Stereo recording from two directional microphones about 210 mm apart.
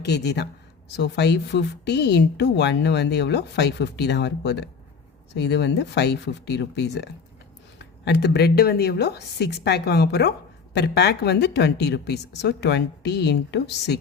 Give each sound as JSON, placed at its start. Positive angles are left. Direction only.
{"t": 0.0, "sound": "speech", "side_deg": 55}